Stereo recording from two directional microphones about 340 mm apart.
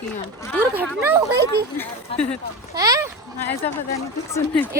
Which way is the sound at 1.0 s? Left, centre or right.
Centre.